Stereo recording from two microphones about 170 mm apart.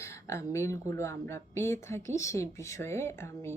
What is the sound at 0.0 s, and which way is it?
Speech, 15° left (ahead or behind).